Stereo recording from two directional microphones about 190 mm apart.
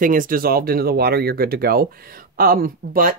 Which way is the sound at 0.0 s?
45° right (ahead or behind).